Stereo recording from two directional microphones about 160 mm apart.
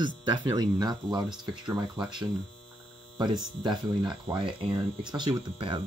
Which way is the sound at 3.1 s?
30° right (ahead or behind).